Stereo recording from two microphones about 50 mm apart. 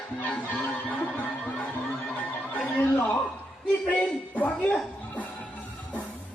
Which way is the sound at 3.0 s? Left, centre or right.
Left.